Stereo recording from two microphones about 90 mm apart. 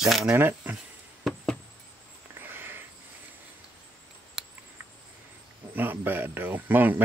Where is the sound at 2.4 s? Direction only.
25° right (ahead or behind).